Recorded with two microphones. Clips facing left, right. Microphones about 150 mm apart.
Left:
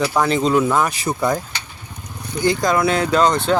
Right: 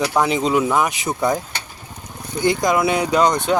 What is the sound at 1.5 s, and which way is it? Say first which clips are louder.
Vehicle: right 1 dB; 55° right (ahead or behind).